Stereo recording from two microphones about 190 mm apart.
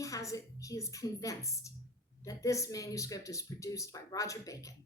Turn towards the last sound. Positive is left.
turn(degrees=15)  # may be behind; listen again after turning